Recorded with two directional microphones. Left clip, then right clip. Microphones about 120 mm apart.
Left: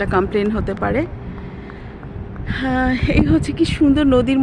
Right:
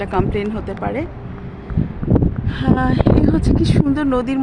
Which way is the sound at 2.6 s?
40° left (ahead or behind).